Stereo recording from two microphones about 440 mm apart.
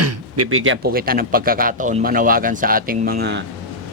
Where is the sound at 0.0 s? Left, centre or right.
Right.